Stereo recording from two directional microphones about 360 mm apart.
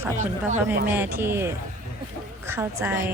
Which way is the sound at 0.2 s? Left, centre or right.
Centre.